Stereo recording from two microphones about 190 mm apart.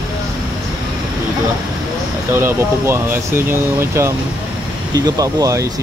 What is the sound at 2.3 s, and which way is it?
Speech, 10° right (ahead or behind).